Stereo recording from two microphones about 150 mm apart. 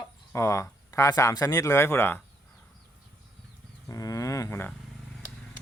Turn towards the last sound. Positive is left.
turn(degrees=15)  # may be behind; listen again after turning